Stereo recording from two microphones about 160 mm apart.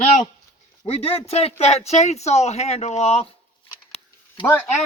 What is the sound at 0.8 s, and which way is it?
Speech, 40° left (ahead or behind).